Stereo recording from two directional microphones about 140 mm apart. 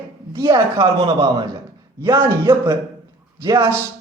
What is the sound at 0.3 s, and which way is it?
Speech, 25° right (ahead or behind).